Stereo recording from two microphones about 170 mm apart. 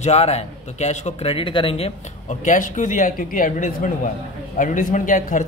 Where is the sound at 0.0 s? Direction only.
40° left (ahead or behind).